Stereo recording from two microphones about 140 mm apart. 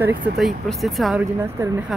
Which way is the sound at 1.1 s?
15° right (ahead or behind).